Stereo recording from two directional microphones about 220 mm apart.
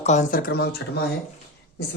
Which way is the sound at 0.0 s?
35° left (ahead or behind).